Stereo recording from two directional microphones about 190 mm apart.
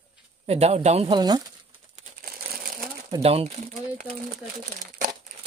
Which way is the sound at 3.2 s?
30° right (ahead or behind).